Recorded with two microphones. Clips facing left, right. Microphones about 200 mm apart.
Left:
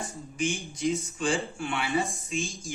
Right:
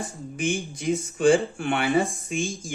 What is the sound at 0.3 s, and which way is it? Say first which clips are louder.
Speech: right 3 dB; 55° right (ahead or behind).